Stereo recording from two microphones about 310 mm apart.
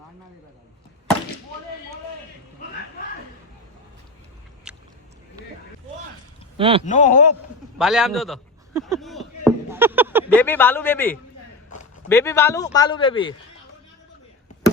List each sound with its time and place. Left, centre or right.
6.6 s speech: centre
6.8 s a man's voice: left
7.8 s a sound: centre
10.3 s a man's voice: centre